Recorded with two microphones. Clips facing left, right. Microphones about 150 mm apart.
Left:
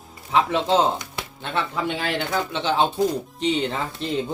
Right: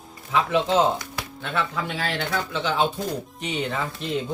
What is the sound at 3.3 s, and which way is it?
Speech, 30° left (ahead or behind).